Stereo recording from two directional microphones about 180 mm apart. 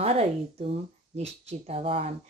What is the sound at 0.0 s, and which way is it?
Speech, 35° right (ahead or behind).